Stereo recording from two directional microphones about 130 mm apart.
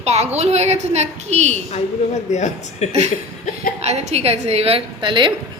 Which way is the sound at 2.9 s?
60° right (ahead or behind).